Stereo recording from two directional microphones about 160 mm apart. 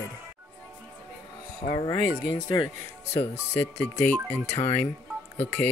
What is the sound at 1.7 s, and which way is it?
Speech, 30° left (ahead or behind).